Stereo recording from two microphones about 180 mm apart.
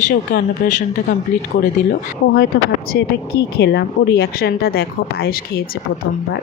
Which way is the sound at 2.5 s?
60° left (ahead or behind).